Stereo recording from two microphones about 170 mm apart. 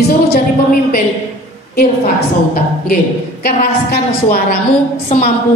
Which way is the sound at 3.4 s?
60° left (ahead or behind).